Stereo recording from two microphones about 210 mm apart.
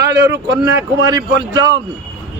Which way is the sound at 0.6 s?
15° right (ahead or behind).